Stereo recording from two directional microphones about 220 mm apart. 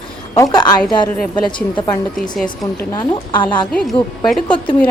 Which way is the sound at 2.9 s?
20° left (ahead or behind).